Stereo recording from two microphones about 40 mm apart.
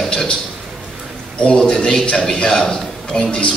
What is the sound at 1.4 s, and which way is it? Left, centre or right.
A man's voice, centre.